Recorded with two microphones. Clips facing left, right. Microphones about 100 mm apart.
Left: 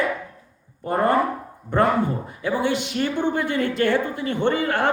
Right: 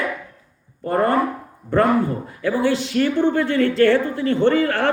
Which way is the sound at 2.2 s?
20° left (ahead or behind).